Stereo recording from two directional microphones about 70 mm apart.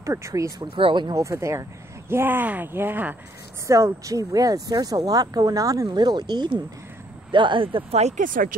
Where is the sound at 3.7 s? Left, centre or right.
Right.